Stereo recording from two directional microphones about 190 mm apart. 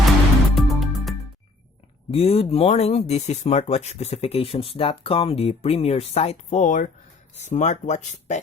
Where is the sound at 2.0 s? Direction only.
30° left (ahead or behind).